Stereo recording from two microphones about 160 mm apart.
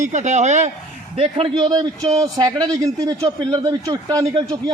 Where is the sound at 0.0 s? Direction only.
45° right (ahead or behind).